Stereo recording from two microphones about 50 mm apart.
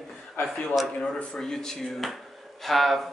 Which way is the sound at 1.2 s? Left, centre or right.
Centre.